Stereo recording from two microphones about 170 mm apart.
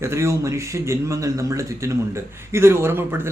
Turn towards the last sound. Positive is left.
turn(degrees=-15)  # may be behind; listen again after turning